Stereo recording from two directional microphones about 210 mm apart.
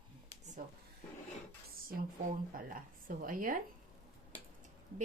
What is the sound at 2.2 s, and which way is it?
Speech, 40° right (ahead or behind).